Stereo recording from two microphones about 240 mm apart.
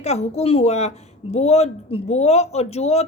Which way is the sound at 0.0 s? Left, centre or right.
Left.